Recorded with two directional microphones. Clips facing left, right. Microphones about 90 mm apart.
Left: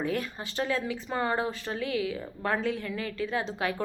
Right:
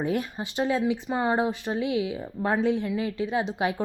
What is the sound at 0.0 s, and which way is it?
A woman's voice, 20° right (ahead or behind).